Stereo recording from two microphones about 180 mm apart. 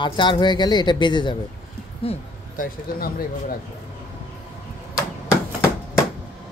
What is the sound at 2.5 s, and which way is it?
Speech, 50° left (ahead or behind).